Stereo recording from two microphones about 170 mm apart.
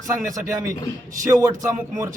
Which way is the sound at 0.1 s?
20° right (ahead or behind).